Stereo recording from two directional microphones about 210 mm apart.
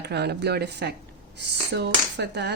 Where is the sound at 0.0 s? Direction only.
50° right (ahead or behind).